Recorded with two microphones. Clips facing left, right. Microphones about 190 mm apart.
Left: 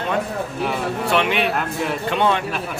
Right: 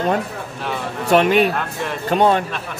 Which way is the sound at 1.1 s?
40° right (ahead or behind).